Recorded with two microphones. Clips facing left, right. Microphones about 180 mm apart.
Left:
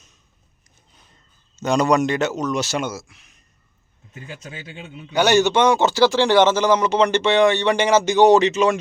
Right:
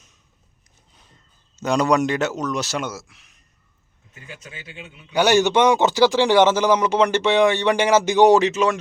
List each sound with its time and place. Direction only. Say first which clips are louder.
1.5 s speech: left 1 dB; centre (ahead or behind)
4.3 s a man's voice: left 3 dB; 35° left (ahead or behind)
5.1 s speech: even; 10° right (ahead or behind)